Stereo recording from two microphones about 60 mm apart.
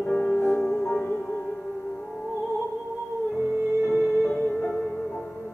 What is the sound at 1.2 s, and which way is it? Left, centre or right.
Music, centre.